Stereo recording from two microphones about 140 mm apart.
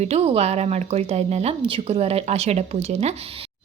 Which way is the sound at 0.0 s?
50° right (ahead or behind).